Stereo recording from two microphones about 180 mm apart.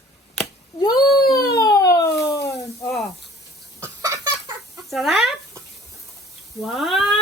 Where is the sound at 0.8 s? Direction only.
20° left (ahead or behind).